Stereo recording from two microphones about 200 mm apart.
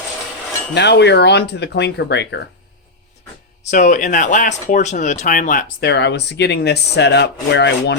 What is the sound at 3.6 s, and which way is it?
Speech, 35° left (ahead or behind).